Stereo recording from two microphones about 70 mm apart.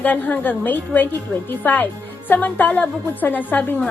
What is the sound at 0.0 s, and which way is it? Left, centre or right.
A woman's voice, left.